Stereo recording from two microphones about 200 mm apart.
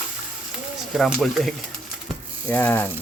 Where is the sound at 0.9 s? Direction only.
Centre (ahead or behind).